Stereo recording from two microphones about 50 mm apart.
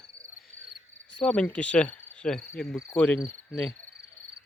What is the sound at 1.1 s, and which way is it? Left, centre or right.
Cricket, left.